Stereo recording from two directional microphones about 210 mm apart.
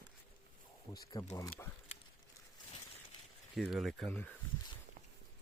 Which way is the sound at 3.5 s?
Centre (ahead or behind).